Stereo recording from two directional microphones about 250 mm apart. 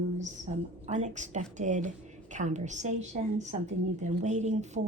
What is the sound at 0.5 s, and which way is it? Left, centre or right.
A woman's voice, right.